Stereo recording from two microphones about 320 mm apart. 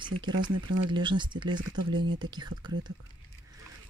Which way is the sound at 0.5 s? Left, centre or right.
Right.